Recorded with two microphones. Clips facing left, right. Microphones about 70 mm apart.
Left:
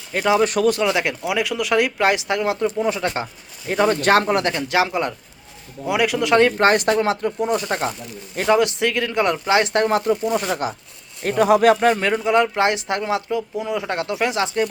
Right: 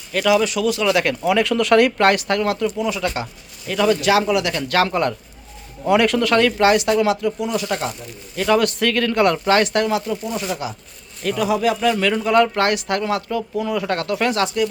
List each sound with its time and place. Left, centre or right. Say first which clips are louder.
0.1 s speech: right 1 dB; left
0.4 s speech: left 2 dB; left
0.9 s speech: right 3 dB; centre; by 4.5 s left
4.5 s speech: right 1 dB; centre
6.4 s speech: even; left
8.4 s speech: even; centre
9.9 s speech: left 4 dB; left
11.9 s speech: right 2 dB; left